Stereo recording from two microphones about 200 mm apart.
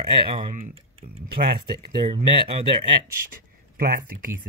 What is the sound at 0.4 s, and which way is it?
Speech, 35° right (ahead or behind).